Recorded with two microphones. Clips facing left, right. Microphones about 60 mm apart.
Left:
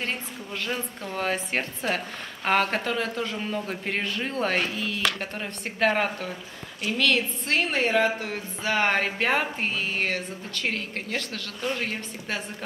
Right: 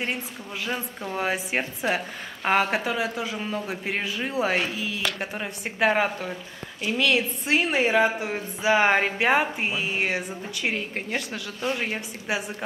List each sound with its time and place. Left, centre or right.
0.7 s a woman's voice: centre